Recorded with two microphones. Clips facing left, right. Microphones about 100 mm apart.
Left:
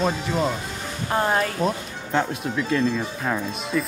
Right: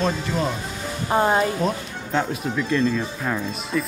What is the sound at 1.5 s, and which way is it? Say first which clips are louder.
Speech: even; centre (ahead or behind).